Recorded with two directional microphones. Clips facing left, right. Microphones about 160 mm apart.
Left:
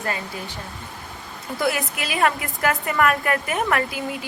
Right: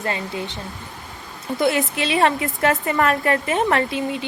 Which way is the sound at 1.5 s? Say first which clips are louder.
Right 4 dB; 25° right (ahead or behind).